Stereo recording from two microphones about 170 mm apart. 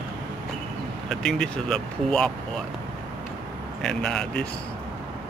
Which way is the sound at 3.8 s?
5° left (ahead or behind).